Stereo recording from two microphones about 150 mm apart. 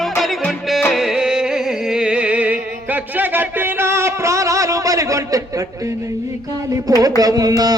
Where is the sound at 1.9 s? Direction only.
5° right (ahead or behind); by 5.4 s 20° right (ahead or behind).